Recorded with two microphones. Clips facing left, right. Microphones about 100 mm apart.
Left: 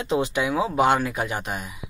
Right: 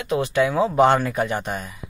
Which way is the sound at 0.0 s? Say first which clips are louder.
Right 3 dB; 20° left (ahead or behind).